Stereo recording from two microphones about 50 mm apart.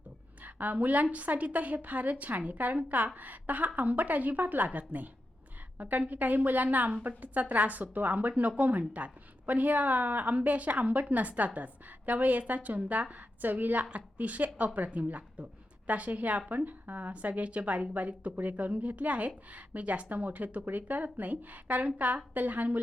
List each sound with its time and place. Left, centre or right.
0.4 s a woman's voice: right